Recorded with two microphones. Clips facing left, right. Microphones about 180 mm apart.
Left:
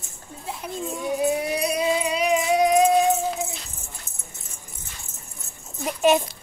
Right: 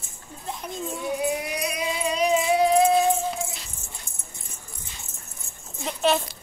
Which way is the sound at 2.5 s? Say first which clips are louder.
Left 1 dB; 15° left (ahead or behind).